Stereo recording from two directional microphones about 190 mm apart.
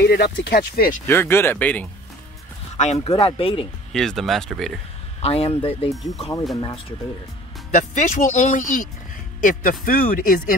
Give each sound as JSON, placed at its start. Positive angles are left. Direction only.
{"t": 0.0, "sound": "speech", "side_deg": 60}
{"t": 1.0, "sound": "speech", "side_deg": 10}
{"t": 2.8, "sound": "speech", "side_deg": 35}
{"t": 3.9, "sound": "speech", "side_deg": 0}
{"t": 5.2, "sound": "speech", "side_deg": 30}
{"t": 7.7, "sound": "speech", "side_deg": 40}